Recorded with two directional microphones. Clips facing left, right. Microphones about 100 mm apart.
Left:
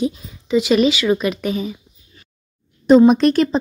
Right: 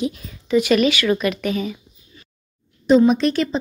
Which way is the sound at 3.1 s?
50° left (ahead or behind).